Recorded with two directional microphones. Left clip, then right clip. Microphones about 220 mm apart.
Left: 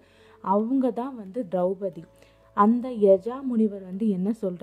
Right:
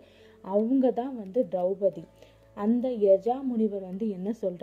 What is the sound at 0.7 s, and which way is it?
A woman's voice, 20° left (ahead or behind).